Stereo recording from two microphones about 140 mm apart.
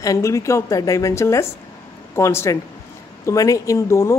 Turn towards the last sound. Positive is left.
turn(degrees=20)  # may be behind; listen again after turning